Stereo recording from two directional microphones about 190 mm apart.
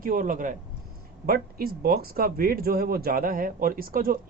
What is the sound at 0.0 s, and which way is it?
Speech, 45° right (ahead or behind).